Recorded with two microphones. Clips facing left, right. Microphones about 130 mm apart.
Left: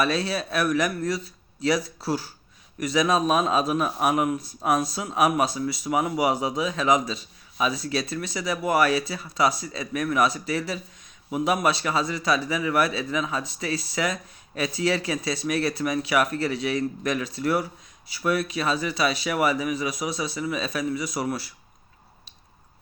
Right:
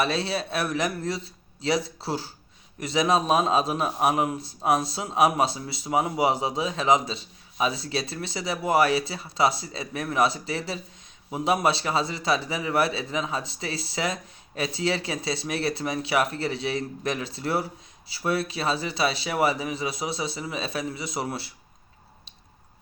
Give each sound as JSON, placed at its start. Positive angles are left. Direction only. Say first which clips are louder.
{"t": 0.0, "sound": "speech", "louder": "left 1 dB", "side_deg": -25}